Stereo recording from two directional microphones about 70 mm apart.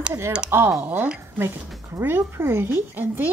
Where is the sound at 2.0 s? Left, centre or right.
Right.